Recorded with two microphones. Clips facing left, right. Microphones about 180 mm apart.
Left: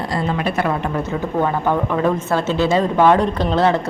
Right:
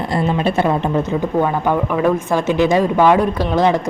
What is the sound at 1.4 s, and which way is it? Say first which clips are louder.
Speech: right 1 dB; 10° right (ahead or behind).